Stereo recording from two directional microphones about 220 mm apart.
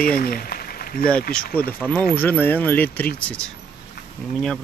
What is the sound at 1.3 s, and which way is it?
Speech, 5° left (ahead or behind).